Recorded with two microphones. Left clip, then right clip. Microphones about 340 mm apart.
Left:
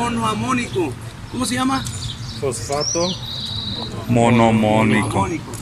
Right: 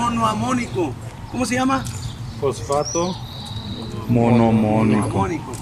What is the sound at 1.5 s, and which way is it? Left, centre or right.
Speech, centre.